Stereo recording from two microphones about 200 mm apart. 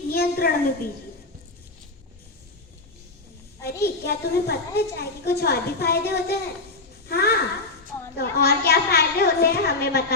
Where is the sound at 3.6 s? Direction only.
50° left (ahead or behind).